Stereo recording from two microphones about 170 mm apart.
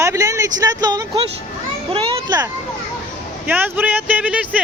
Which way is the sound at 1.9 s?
30° right (ahead or behind).